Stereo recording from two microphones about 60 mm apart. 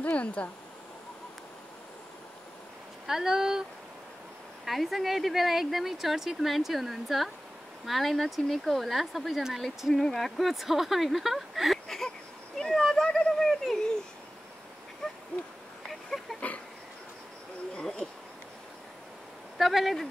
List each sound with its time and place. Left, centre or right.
0.0 s speech: left
3.1 s speech: centre
4.6 s speech: centre
15.9 s a sound: centre
16.3 s a sound: left
17.7 s owl: centre
19.6 s speech: centre